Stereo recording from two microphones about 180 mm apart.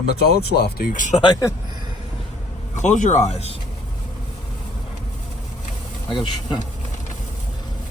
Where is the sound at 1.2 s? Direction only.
20° left (ahead or behind).